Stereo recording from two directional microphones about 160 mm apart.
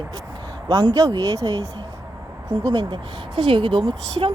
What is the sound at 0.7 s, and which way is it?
Speech, 25° right (ahead or behind).